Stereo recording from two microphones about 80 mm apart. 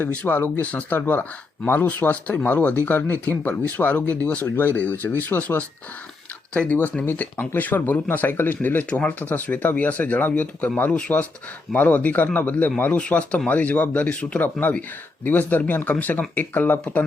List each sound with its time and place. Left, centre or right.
0.0 s speech: centre